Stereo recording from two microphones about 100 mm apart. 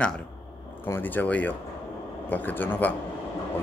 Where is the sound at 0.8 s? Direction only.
20° left (ahead or behind).